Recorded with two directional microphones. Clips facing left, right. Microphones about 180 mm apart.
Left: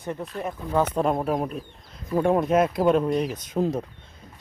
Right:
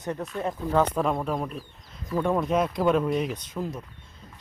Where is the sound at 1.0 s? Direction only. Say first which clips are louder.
Left 3 dB; 40° left (ahead or behind).